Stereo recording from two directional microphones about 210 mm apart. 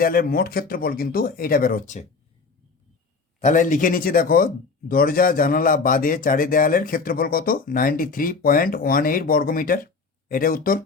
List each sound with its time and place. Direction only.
0.0 s speech: 45° left (ahead or behind)
3.4 s speech: 40° left (ahead or behind)